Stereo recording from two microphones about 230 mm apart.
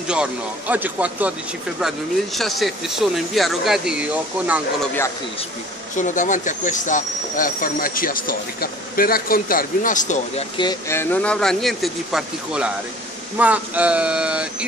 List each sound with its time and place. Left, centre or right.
0.1 s speech: centre
5.9 s speech: left
10.6 s speech: centre